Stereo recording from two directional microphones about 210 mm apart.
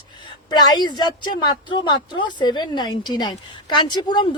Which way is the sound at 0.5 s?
20° left (ahead or behind).